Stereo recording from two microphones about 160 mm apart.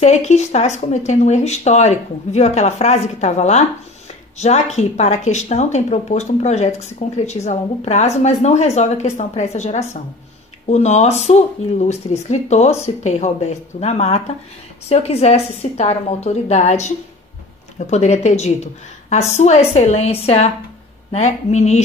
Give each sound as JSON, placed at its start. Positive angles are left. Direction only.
{"t": 0.0, "sound": "a woman's voice", "side_deg": 45}